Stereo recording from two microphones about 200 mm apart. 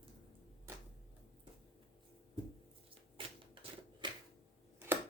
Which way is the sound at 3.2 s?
25° right (ahead or behind).